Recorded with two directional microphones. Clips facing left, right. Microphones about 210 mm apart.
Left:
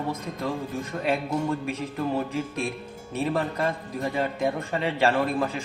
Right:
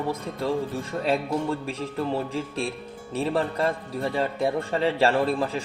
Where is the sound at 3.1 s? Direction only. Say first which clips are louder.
Right 1 dB; 35° right (ahead or behind).